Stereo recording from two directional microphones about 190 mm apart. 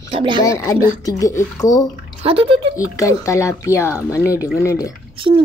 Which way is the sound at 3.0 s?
15° left (ahead or behind).